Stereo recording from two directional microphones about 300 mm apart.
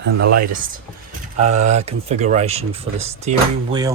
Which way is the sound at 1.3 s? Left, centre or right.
Right.